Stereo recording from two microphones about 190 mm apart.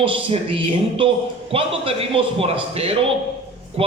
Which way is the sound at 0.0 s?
30° right (ahead or behind).